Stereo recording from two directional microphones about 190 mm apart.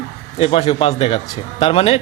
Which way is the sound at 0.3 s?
30° left (ahead or behind).